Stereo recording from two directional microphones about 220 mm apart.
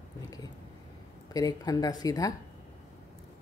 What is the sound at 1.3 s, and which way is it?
Speech, 15° left (ahead or behind).